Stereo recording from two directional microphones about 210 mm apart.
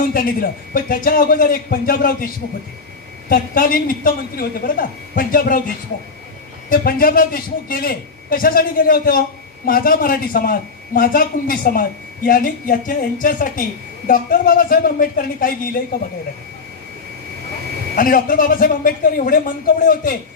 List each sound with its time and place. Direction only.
0.1 s a man's voice: 45° left (ahead or behind)
6.7 s a man's voice: 45° left (ahead or behind)
17.9 s a woman's voice: 40° left (ahead or behind)